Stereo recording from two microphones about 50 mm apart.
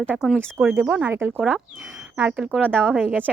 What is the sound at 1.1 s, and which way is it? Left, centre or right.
Speech, right.